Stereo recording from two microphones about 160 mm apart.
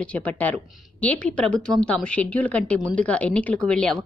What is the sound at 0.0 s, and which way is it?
A woman's voice, 10° left (ahead or behind).